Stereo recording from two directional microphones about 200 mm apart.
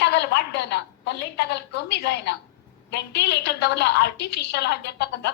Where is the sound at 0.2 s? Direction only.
60° left (ahead or behind).